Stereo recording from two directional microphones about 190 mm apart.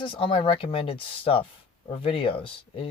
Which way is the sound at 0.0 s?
30° left (ahead or behind).